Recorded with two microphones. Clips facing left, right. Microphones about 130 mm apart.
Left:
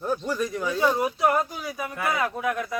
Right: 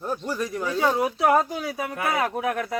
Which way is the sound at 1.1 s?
80° right.